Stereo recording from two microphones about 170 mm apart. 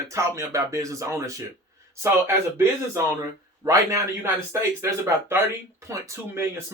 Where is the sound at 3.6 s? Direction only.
15° right (ahead or behind).